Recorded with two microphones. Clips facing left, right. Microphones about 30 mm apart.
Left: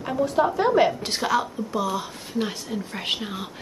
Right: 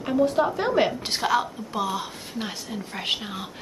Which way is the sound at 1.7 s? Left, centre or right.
Centre.